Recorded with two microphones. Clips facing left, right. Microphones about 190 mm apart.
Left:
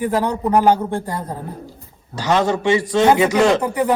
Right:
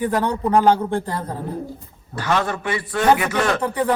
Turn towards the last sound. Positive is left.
turn(degrees=10)  # may be behind; listen again after turning